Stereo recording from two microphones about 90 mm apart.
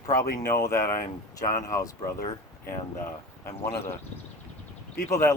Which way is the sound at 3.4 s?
25° left (ahead or behind).